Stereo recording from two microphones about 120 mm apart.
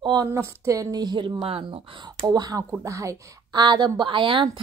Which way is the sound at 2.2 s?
30° right (ahead or behind).